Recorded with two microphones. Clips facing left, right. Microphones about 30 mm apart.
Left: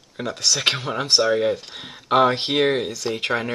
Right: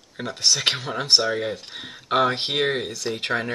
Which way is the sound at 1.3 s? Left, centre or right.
Centre.